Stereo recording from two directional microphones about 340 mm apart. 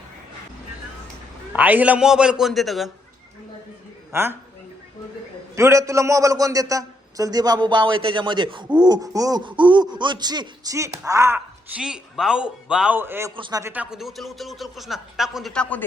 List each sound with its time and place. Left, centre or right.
1.5 s a man's voice: centre
4.1 s speech: centre
5.5 s speech: centre